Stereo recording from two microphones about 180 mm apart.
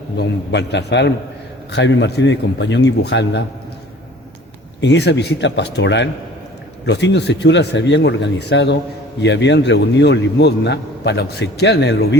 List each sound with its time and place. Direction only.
0.2 s a man's voice: 70° left (ahead or behind)
4.8 s a man's voice: 70° left (ahead or behind)